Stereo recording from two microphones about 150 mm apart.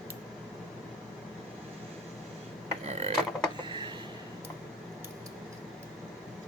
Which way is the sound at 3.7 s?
30° right (ahead or behind).